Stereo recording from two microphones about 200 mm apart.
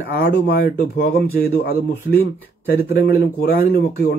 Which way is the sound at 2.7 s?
50° left (ahead or behind).